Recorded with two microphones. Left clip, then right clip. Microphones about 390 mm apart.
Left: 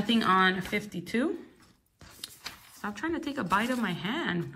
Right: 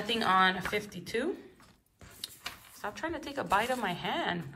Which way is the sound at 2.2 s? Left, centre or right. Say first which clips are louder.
Right 1 dB; centre.